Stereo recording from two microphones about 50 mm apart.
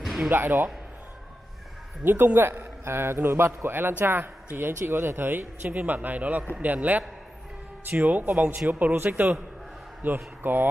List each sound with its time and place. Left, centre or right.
0.0 s a sound: centre
0.3 s a man's voice: right
2.0 s a man's voice: right
2.6 s a man's voice: right
4.8 s speech: right